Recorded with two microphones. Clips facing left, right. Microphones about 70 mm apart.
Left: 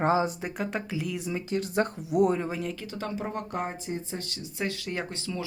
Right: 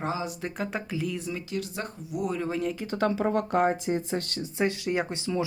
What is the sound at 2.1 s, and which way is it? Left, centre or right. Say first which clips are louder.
Speech: left 8 dB; left.